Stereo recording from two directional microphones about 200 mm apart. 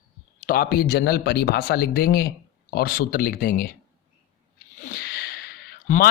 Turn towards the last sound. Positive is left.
turn(degrees=50)  # may be behind; listen again after turning